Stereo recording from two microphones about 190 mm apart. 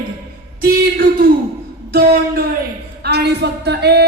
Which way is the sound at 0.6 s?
50° right (ahead or behind).